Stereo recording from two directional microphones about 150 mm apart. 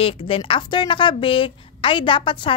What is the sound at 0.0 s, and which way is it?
A woman's voice, 35° left (ahead or behind).